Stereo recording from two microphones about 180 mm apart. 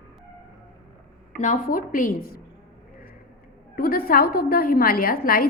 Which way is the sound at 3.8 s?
55° left (ahead or behind).